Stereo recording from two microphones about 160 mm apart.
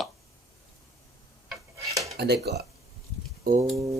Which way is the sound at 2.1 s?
90° right.